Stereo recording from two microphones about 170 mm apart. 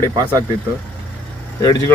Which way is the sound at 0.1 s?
20° right (ahead or behind).